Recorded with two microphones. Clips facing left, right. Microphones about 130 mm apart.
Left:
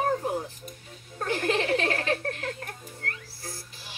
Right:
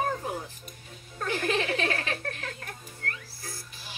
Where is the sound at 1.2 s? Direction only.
40° left (ahead or behind).